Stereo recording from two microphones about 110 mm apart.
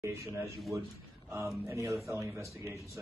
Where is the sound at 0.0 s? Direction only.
25° right (ahead or behind).